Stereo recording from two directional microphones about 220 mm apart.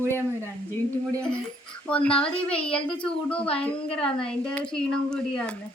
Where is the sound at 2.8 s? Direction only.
20° left (ahead or behind).